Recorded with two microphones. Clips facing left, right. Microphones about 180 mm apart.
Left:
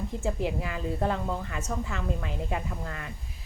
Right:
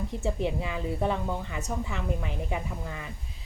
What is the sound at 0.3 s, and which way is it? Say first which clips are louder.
A woman's voice: right 1 dB; 20° right (ahead or behind).